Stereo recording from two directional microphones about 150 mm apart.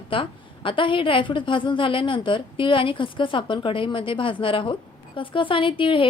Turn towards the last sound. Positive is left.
turn(degrees=35)  # may be behind; listen again after turning